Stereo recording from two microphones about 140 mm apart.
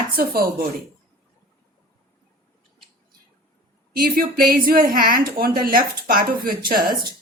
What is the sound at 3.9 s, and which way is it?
A woman's voice, 90° right.